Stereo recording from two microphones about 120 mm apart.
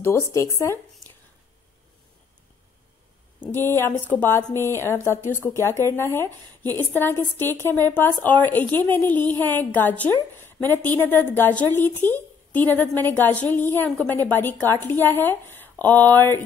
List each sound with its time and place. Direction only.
0.0 s speech: 25° left (ahead or behind)
3.5 s a woman's voice: 20° left (ahead or behind)